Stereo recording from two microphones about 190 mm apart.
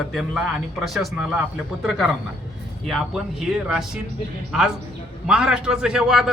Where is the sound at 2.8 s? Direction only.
Centre (ahead or behind).